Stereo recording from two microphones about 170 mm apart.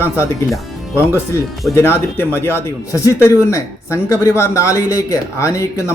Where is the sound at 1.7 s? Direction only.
15° left (ahead or behind).